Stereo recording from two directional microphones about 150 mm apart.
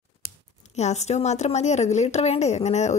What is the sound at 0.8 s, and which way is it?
A woman's voice, 50° left (ahead or behind).